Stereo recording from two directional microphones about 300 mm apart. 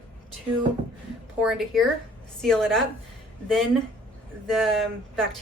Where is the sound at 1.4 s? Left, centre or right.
Centre.